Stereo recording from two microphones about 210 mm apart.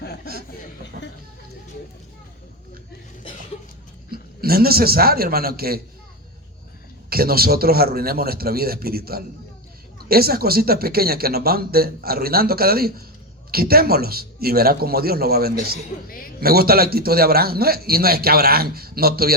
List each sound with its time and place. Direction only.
4.1 s a man's voice: 45° right (ahead or behind)
7.1 s a man's voice: 45° right (ahead or behind)
16.0 s a man's voice: 45° left (ahead or behind)
16.4 s a man's voice: 45° right (ahead or behind)